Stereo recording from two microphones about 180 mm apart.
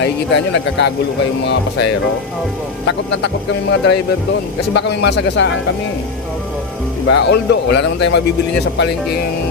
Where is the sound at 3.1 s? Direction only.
85° left.